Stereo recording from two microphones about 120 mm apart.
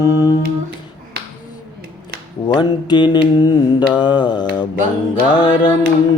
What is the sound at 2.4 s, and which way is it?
Mantra, 35° left (ahead or behind).